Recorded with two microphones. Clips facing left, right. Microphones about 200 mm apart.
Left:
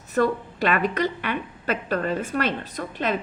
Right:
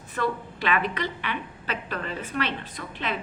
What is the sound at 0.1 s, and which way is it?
A woman's voice, 45° left (ahead or behind).